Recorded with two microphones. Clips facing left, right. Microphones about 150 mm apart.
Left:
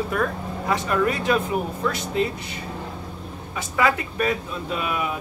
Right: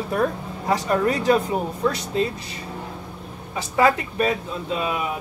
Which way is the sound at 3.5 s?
30° right (ahead or behind).